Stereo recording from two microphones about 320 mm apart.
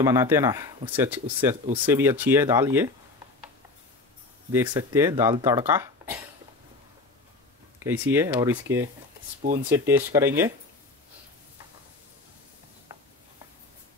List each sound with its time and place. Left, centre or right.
0.0 s speech: centre
4.5 s speech: centre
7.8 s speech: centre
9.4 s speech: right
9.7 s speech: centre